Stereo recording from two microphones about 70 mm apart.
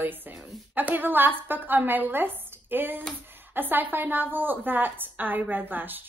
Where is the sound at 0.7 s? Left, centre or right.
Right.